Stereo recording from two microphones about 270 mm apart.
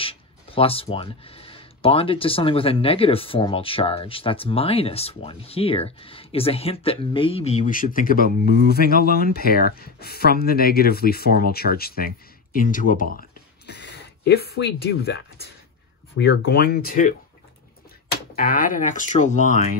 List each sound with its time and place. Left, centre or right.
0.0 s speech: centre; by 15.1 s left
16.2 s speech: left
18.3 s speech: left